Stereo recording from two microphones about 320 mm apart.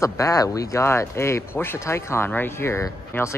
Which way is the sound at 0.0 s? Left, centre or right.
Centre.